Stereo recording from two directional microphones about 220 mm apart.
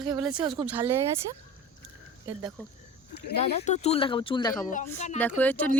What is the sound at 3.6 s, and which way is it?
Speech, 30° left (ahead or behind).